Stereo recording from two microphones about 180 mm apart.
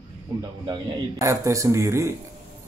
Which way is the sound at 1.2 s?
15° right (ahead or behind).